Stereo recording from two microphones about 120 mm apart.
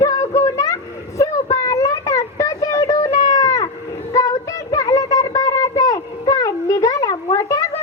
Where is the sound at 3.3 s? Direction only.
30° left (ahead or behind).